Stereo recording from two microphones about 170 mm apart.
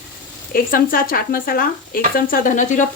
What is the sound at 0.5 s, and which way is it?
Speech, 55° left (ahead or behind).